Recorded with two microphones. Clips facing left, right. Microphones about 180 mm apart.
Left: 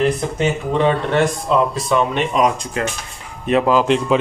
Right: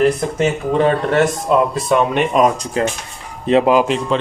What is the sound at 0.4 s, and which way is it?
Speech, 45° right (ahead or behind).